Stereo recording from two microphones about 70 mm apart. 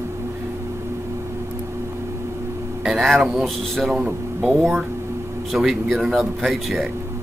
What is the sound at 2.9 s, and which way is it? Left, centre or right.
Speech, centre.